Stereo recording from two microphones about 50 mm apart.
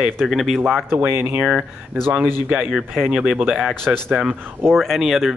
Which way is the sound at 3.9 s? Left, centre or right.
Right.